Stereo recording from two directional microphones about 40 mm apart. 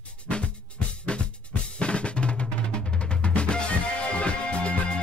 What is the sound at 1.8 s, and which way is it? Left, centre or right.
Drum kit, left.